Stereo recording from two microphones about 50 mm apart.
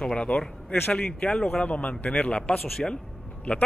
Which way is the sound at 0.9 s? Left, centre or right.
Left.